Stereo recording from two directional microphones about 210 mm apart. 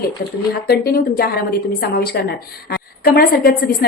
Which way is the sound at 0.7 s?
45° left (ahead or behind).